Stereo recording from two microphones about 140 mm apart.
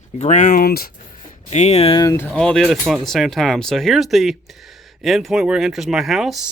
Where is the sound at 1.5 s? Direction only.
50° left (ahead or behind).